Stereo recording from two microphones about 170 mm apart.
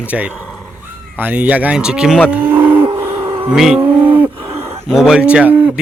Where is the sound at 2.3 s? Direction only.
10° right (ahead or behind).